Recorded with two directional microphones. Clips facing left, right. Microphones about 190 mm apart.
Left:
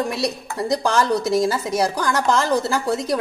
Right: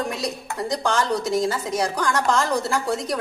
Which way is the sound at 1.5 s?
35° left (ahead or behind).